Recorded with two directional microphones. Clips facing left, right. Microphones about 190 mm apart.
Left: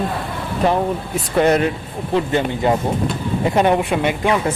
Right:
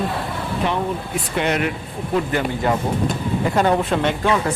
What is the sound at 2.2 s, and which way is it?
Speech, 25° left (ahead or behind).